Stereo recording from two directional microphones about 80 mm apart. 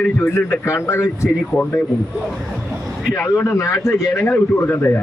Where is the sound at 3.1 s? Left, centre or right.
Left.